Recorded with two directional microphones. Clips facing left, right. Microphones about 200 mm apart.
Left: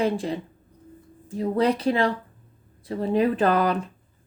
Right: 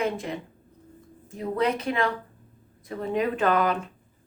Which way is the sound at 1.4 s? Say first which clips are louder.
Left 4 dB; 35° left (ahead or behind).